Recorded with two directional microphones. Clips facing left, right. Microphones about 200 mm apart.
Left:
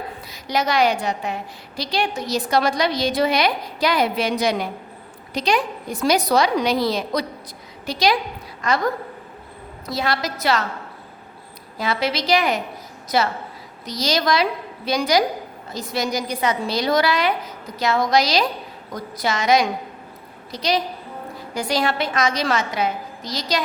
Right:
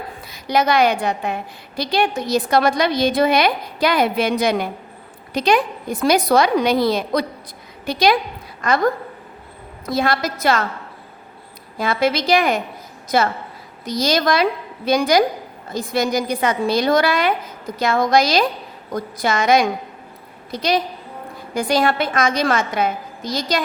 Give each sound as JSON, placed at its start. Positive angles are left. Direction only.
{"t": 0.3, "sound": "a woman's voice", "side_deg": -55}
{"t": 9.8, "sound": "a woman's voice", "side_deg": -50}
{"t": 11.8, "sound": "a woman's voice", "side_deg": -50}
{"t": 13.8, "sound": "a woman's voice", "side_deg": -50}